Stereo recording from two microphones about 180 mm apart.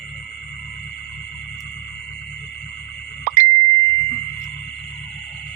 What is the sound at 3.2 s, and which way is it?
Plop, 45° right (ahead or behind).